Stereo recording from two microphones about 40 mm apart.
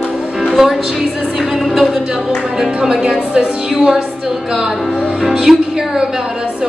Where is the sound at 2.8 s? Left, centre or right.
Centre.